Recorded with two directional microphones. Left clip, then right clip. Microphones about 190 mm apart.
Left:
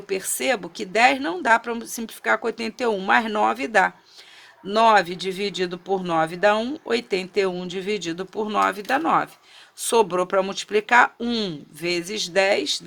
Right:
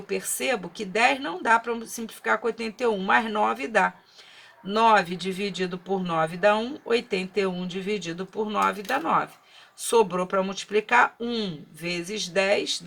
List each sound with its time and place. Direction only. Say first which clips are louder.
0.1 s speech: left 3 dB; 50° left (ahead or behind)